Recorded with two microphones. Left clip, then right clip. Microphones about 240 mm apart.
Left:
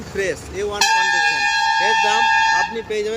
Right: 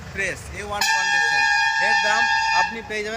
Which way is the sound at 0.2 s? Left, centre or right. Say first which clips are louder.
Left 5 dB; centre.